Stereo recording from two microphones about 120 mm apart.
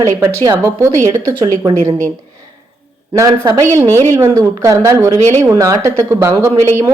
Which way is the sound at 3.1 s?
30° right (ahead or behind).